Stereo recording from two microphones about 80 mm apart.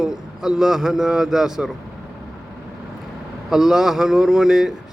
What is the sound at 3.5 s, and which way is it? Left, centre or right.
A man's voice, centre.